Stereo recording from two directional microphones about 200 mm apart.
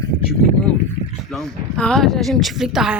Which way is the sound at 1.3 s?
5° left (ahead or behind).